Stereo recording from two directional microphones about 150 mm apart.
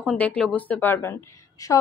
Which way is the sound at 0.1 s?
10° left (ahead or behind).